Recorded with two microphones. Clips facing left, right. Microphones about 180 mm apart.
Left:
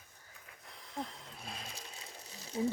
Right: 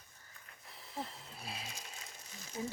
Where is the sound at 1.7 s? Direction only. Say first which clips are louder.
Left 2 dB; 35° left (ahead or behind).